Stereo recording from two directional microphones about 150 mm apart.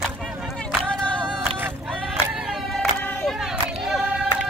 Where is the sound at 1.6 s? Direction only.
10° right (ahead or behind).